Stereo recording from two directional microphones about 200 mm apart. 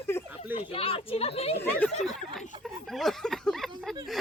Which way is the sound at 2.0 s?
Centre (ahead or behind).